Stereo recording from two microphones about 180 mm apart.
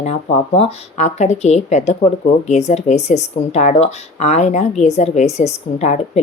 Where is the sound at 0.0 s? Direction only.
35° left (ahead or behind).